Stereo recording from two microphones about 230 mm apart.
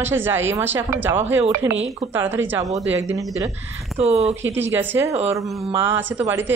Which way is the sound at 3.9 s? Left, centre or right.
Right.